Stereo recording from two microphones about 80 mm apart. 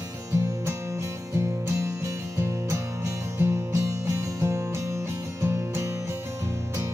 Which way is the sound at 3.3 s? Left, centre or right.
Right.